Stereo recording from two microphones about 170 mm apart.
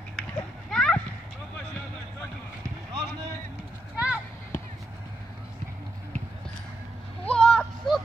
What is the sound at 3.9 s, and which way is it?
Clip-clop, 10° right (ahead or behind).